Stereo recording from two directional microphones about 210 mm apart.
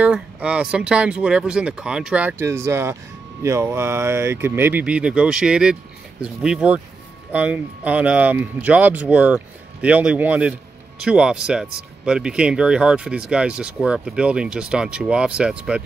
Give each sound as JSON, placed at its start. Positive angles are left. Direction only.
{"t": 0.0, "sound": "speech", "side_deg": -5}